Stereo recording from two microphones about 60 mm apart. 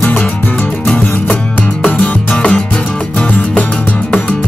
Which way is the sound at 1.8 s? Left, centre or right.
Left.